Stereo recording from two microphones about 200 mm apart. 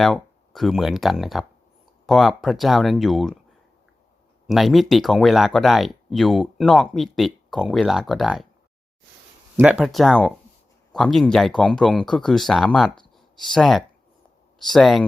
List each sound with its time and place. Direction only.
0.0 s speech: centre (ahead or behind)
4.4 s speech: centre (ahead or behind)
9.6 s speech: 5° right (ahead or behind)